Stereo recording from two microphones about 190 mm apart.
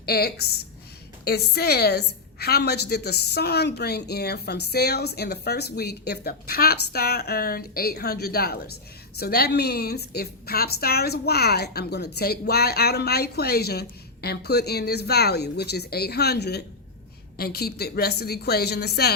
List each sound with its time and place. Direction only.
0.0 s a woman's voice: 55° left (ahead or behind)